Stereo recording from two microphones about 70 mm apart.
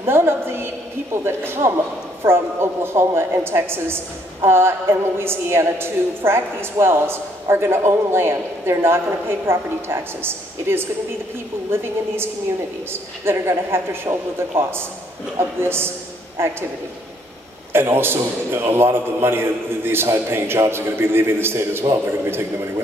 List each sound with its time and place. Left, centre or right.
0.0 s a woman's voice: right
17.7 s a woman's voice: right